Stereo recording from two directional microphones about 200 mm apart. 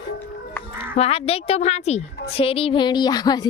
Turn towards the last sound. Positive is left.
turn(degrees=20)  # may be behind; listen again after turning